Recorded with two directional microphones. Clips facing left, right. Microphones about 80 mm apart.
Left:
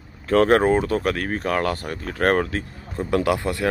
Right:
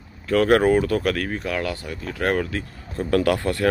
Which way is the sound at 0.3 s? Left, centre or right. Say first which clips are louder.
Even; left.